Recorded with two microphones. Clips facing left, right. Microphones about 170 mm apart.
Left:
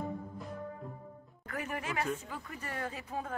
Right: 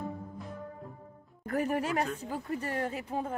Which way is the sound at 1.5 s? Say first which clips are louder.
Right 8 dB; 35° right (ahead or behind).